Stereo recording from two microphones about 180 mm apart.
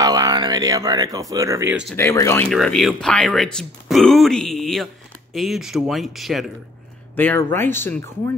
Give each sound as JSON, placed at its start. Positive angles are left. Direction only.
{"t": 0.0, "sound": "speech", "side_deg": -20}
{"t": 2.0, "sound": "speech", "side_deg": 15}
{"t": 2.5, "sound": "speech", "side_deg": 0}
{"t": 7.2, "sound": "speech", "side_deg": 10}